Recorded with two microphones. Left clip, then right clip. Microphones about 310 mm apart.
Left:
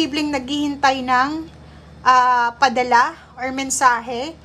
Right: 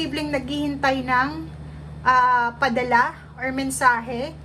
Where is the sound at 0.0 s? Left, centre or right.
Centre.